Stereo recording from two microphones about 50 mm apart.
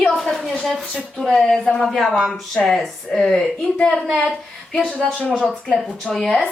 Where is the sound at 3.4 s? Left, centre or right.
Left.